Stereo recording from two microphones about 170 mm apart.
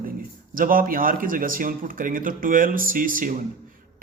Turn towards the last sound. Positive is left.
turn(degrees=-55)  # may be behind; listen again after turning